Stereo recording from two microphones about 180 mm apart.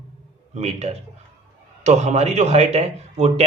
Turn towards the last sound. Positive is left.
turn(degrees=-35)  # may be behind; listen again after turning